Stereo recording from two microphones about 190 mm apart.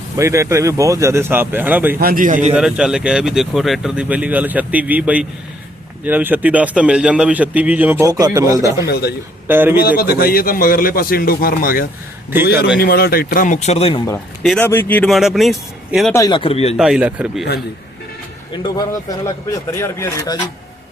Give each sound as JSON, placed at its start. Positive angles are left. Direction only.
{"t": 0.2, "sound": "a man's voice", "side_deg": -15}
{"t": 2.0, "sound": "a man's voice", "side_deg": -50}
{"t": 2.6, "sound": "a man's voice", "side_deg": -5}
{"t": 8.9, "sound": "a man's voice", "side_deg": 55}
{"t": 9.5, "sound": "a man's voice", "side_deg": -10}
{"t": 10.0, "sound": "speech", "side_deg": 55}
{"t": 14.4, "sound": "speech", "side_deg": 5}
{"t": 16.1, "sound": "speech", "side_deg": 20}
{"t": 16.7, "sound": "speech", "side_deg": -5}
{"t": 18.5, "sound": "speech", "side_deg": 20}